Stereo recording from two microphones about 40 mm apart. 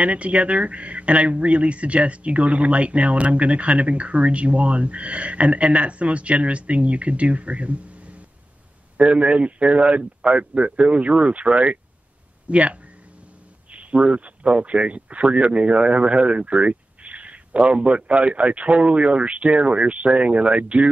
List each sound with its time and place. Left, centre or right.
0.0 s speech: right